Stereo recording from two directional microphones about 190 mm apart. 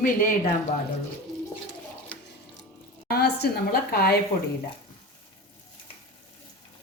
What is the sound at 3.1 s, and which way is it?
A woman's voice, 60° left (ahead or behind).